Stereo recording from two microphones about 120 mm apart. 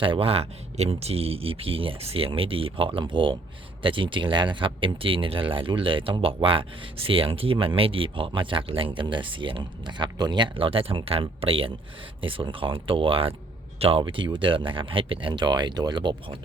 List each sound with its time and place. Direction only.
0.0 s speech: 50° right (ahead or behind)